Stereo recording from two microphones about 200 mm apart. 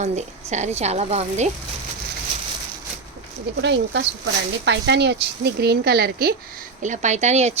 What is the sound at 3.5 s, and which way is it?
Speech, 60° right (ahead or behind).